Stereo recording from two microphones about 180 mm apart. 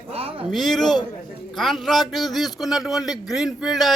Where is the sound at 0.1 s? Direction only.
30° right (ahead or behind).